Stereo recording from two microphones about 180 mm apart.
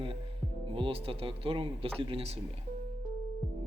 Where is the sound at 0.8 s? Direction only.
30° right (ahead or behind).